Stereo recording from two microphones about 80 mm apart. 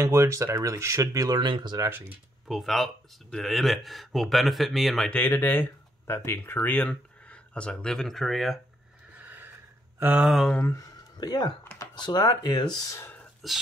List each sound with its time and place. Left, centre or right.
0.0 s speech: right
1.0 s speech: right
1.9 s speech: right
2.4 s speech: centre
5.1 s speech: left; by 8.5 s centre
9.2 s a sound: right
10.2 s speech: centre
10.6 s speech: left
11.1 s speech: left
13.4 s speech: centre